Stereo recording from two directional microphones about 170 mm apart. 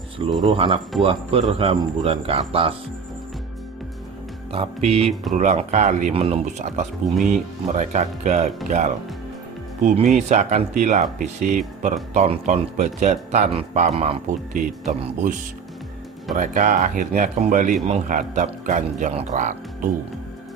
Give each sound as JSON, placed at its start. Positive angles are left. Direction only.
{"t": 0.4, "sound": "speech", "side_deg": -30}
{"t": 4.5, "sound": "speech", "side_deg": -35}
{"t": 16.3, "sound": "speech", "side_deg": -50}